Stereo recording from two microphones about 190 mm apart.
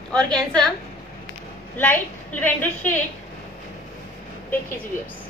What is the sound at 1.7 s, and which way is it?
Speech, 10° left (ahead or behind).